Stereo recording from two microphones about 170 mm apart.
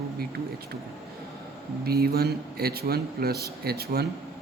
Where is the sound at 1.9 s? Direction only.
65° right (ahead or behind).